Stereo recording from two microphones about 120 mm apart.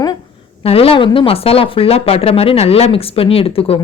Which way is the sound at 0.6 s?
55° left (ahead or behind).